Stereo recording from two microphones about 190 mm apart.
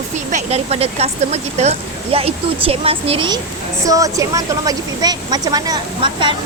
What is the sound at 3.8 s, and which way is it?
Speech, 15° right (ahead or behind).